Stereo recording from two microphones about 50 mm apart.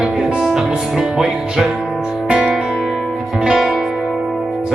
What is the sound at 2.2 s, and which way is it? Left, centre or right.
Music, centre.